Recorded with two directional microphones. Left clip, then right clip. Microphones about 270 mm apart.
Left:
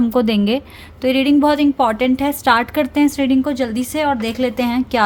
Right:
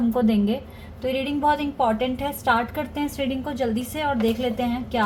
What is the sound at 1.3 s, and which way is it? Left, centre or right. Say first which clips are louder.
A woman's voice: left 7 dB; left.